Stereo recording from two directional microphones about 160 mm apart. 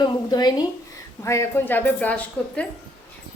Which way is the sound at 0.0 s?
25° left (ahead or behind).